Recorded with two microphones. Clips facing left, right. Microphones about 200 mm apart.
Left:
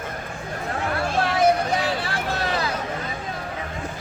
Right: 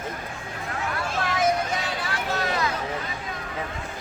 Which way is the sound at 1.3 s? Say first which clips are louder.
Left 4 dB; 35° left (ahead or behind).